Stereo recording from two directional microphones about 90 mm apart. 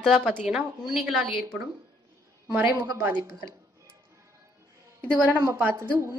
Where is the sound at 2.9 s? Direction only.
25° right (ahead or behind).